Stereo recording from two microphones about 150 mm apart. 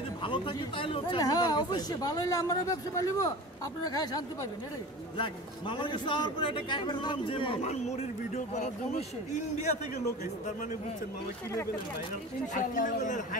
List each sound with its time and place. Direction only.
0.2 s a man's voice: 35° left (ahead or behind); by 9.0 s 50° left (ahead or behind)
12.5 s a man's voice: 60° left (ahead or behind)